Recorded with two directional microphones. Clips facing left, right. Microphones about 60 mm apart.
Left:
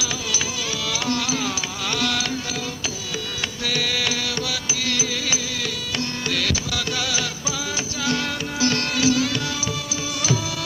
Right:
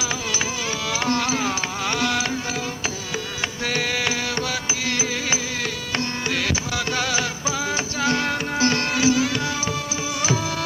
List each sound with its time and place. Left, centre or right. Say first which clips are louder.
0.9 s music: right 3 dB; right
3.6 s music: right 1 dB; right